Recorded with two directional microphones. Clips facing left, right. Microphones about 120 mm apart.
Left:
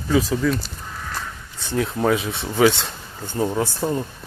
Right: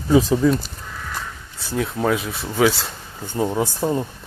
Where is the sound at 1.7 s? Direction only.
Centre (ahead or behind).